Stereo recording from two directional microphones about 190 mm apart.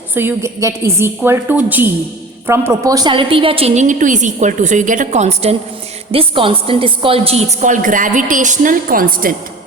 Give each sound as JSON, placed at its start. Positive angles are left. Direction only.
{"t": 0.1, "sound": "a woman's voice", "side_deg": -10}